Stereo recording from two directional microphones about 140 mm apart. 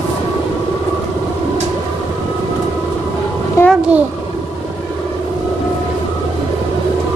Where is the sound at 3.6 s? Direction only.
20° left (ahead or behind).